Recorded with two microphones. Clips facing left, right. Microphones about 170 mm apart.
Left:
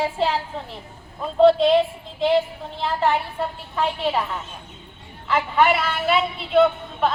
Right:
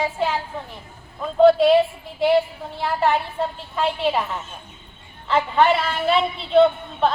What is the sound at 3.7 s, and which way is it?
Speech, 15° right (ahead or behind).